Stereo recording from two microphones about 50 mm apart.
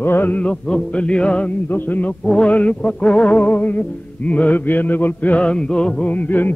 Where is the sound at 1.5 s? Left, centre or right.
Left.